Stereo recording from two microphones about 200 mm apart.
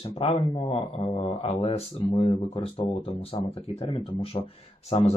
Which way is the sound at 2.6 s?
30° left (ahead or behind).